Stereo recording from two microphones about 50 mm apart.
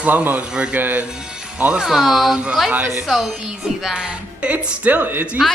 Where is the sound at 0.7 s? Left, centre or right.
Right.